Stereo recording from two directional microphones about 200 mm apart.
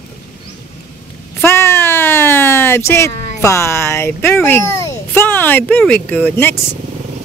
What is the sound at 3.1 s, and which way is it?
Music, 35° left (ahead or behind).